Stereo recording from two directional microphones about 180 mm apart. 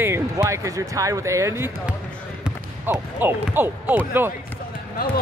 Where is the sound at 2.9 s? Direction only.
10° right (ahead or behind).